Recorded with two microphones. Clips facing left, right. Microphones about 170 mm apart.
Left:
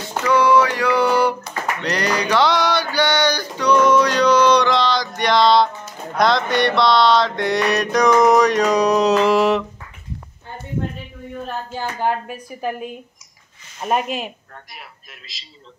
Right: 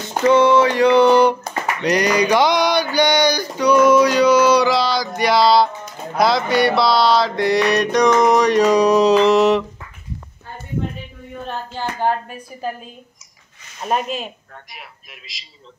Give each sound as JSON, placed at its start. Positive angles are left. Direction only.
{"t": 0.2, "sound": "a sound", "side_deg": -25}
{"t": 1.8, "sound": "mantra", "side_deg": -15}
{"t": 13.8, "sound": "mantra", "side_deg": 5}